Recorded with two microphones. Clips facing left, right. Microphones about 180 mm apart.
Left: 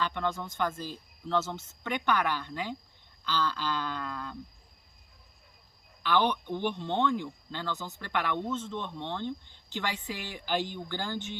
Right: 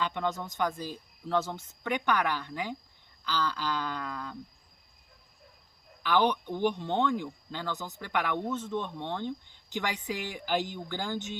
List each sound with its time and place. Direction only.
0.0 s speech: 15° right (ahead or behind)
6.1 s speech: 10° right (ahead or behind)